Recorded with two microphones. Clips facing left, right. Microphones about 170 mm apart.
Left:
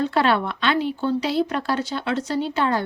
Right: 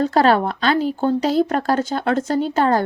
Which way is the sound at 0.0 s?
40° right (ahead or behind).